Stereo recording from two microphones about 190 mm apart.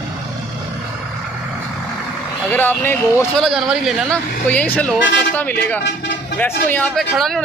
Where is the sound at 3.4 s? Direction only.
Centre (ahead or behind).